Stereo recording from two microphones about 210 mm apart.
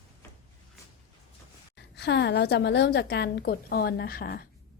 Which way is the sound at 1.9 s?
55° left (ahead or behind).